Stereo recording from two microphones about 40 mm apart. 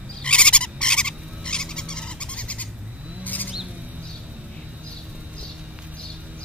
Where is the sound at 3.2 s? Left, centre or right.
Left.